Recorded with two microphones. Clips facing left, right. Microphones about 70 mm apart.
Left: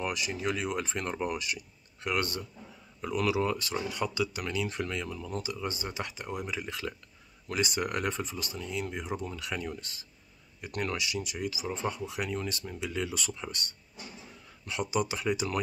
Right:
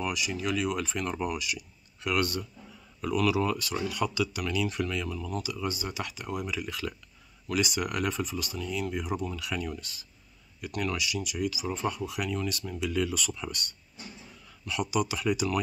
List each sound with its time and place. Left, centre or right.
0.0 s speech: left